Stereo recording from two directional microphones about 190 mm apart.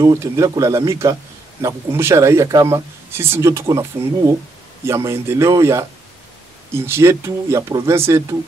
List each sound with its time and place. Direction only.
0.0 s speech: 15° right (ahead or behind)